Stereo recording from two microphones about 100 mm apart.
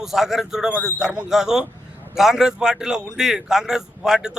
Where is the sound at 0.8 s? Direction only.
20° left (ahead or behind).